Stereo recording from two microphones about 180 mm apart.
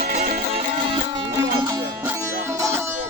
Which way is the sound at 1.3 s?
20° right (ahead or behind).